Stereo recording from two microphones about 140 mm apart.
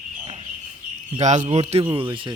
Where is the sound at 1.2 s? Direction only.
55° right (ahead or behind).